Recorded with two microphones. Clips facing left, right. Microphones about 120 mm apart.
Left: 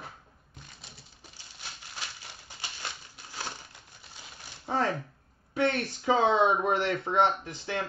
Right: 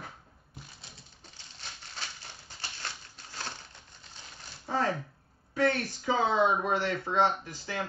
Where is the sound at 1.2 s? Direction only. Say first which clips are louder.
Left 1 dB; 10° left (ahead or behind).